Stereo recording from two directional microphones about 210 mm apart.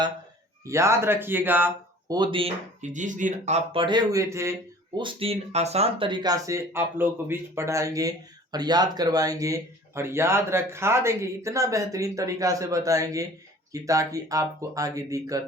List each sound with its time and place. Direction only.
0.6 s speech: 15° right (ahead or behind)
4.9 s speech: 25° right (ahead or behind)